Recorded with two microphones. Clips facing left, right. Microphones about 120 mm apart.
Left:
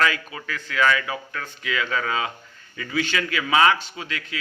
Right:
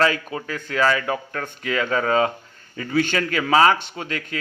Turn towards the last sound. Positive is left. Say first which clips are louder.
# right 4 dB
turn(degrees=-45)  # may be behind; listen again after turning